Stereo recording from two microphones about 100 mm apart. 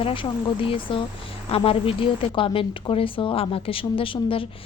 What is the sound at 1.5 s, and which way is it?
A woman's voice, 75° left (ahead or behind).